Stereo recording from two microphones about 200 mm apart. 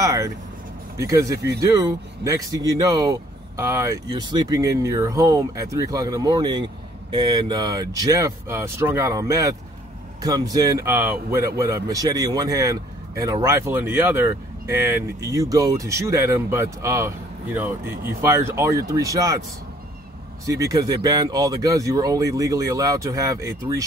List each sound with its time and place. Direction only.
0.0 s speech: 15° right (ahead or behind)
20.4 s speech: 15° right (ahead or behind)